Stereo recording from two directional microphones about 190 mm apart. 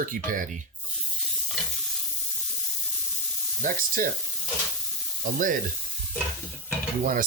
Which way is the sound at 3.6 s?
45° right (ahead or behind).